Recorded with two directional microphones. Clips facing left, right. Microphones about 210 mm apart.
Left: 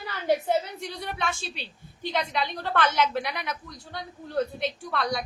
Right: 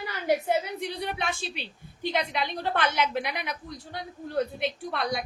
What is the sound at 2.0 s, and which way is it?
A woman's voice, 15° right (ahead or behind).